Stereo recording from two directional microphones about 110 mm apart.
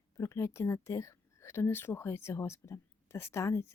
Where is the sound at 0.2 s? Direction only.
25° left (ahead or behind).